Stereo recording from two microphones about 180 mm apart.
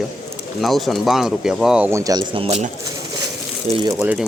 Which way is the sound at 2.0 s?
20° right (ahead or behind).